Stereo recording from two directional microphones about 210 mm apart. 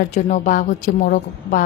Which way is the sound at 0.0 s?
35° left (ahead or behind).